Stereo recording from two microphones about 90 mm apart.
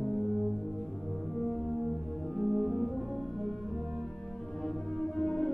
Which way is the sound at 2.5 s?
Centre (ahead or behind).